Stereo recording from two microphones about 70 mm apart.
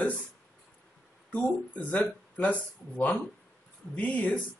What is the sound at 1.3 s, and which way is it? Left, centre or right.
Speech, centre.